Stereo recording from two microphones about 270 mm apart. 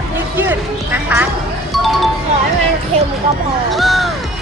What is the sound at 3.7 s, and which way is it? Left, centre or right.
Speech, centre.